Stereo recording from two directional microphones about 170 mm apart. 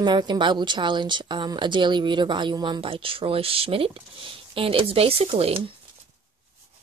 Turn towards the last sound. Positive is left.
turn(degrees=-35)  # may be behind; listen again after turning